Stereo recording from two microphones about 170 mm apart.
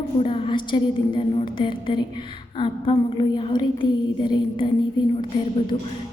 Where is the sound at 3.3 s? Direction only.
30° left (ahead or behind).